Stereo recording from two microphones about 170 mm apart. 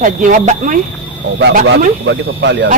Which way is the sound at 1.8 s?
85° right.